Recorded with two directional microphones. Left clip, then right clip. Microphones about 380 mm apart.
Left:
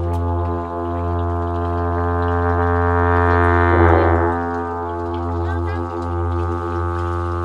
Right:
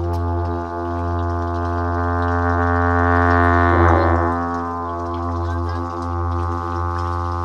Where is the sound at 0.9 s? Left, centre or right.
Right.